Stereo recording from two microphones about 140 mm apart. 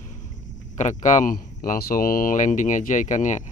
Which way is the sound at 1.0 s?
65° left (ahead or behind).